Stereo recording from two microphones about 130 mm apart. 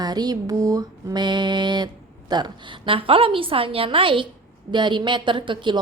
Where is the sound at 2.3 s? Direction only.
35° right (ahead or behind).